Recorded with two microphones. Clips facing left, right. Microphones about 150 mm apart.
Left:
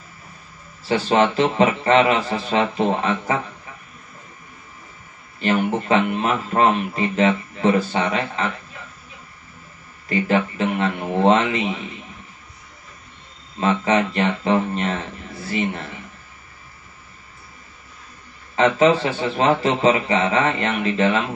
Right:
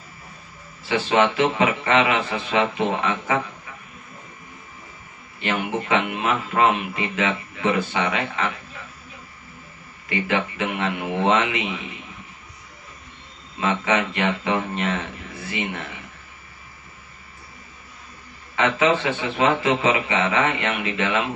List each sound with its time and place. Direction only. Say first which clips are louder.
0.8 s speech: left 2 dB; 40° left (ahead or behind)
5.4 s speech: left 5 dB; 40° left (ahead or behind)
10.0 s speech: left 4 dB; 35° left (ahead or behind)
13.6 s speech: left 3 dB; 35° left (ahead or behind)
18.6 s speech: left 4 dB; 35° left (ahead or behind)